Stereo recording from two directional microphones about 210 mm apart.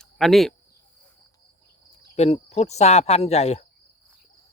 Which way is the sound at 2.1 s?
30° left (ahead or behind).